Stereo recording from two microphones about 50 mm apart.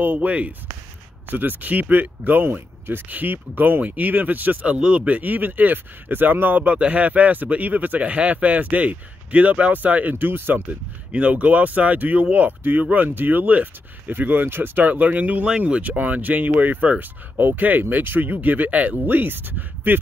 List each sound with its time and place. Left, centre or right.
0.0 s speech: right
10.1 s speech: right
10.7 s speech: right